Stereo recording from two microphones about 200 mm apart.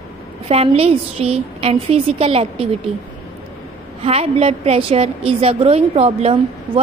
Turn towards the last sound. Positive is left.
turn(degrees=-30)  # may be behind; listen again after turning